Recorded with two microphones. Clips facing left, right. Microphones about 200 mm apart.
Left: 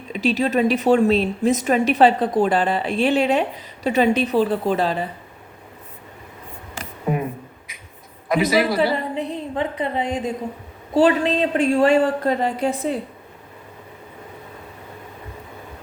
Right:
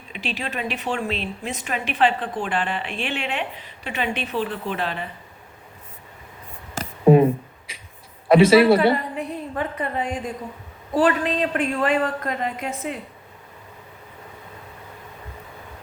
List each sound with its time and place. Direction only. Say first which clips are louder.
0.1 s a woman's voice: left 11 dB; 40° left (ahead or behind)
8.3 s a man's voice: right 6 dB; 30° right (ahead or behind)
9.1 s a woman's voice: left 3 dB; 25° left (ahead or behind)